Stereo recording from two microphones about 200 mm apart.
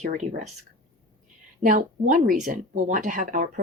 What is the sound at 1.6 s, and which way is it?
Speech, 40° right (ahead or behind).